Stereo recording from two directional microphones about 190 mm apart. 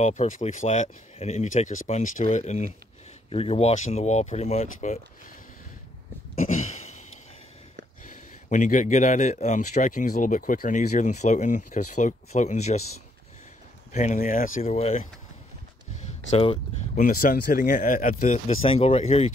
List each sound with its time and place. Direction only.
0.0 s a man's voice: 40° left (ahead or behind)
6.4 s a sound: 40° left (ahead or behind)
8.0 s a man's voice: 40° left (ahead or behind)
13.9 s a man's voice: 40° left (ahead or behind)
16.3 s speech: 35° left (ahead or behind)
17.0 s speech: 50° left (ahead or behind); by 19.3 s 30° left (ahead or behind)